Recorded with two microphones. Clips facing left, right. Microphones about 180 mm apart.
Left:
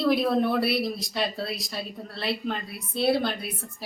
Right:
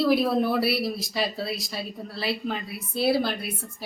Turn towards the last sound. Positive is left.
turn(degrees=0)  # may be behind; listen again after turning